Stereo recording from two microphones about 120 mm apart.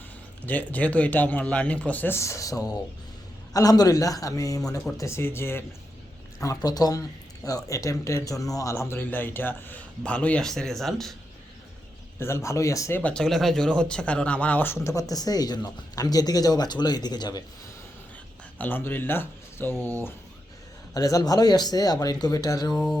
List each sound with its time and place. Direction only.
0.4 s a man's voice: 15° left (ahead or behind)
12.2 s a man's voice: 25° left (ahead or behind)
13.0 s speech: 10° left (ahead or behind); by 17.4 s 35° left (ahead or behind)
18.6 s a man's voice: 15° left (ahead or behind)
20.9 s speech: 30° left (ahead or behind)
22.7 s mantra: 5° left (ahead or behind)